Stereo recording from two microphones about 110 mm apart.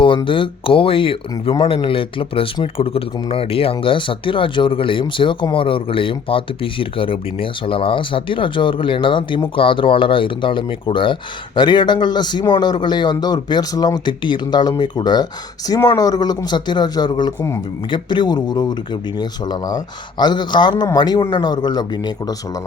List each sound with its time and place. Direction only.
0.3 s speech: 50° left (ahead or behind)